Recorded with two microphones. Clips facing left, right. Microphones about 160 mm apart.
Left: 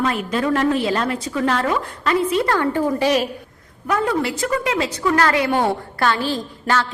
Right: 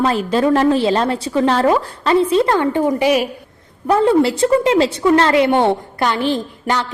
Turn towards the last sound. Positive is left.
turn(degrees=-20)  # may be behind; listen again after turning